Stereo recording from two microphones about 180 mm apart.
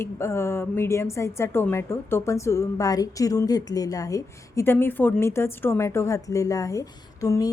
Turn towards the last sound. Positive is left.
turn(degrees=20)  # may be behind; listen again after turning